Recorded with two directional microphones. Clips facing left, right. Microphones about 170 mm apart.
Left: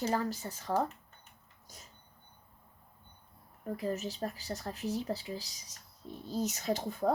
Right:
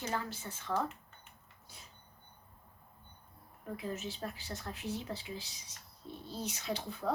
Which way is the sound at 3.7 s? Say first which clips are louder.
Left 5 dB; 40° left (ahead or behind).